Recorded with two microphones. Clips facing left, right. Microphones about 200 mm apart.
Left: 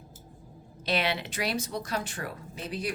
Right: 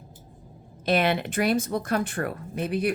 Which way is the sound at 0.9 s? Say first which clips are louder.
Right 6 dB; 50° right (ahead or behind).